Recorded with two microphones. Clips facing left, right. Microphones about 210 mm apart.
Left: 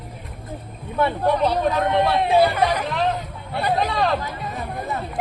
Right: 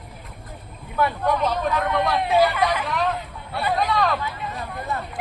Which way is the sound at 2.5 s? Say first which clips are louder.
Left 2 dB; 40° left (ahead or behind).